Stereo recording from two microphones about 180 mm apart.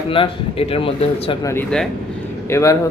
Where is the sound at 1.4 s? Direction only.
15° left (ahead or behind).